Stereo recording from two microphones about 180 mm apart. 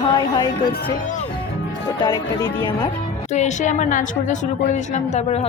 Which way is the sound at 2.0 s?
25° left (ahead or behind).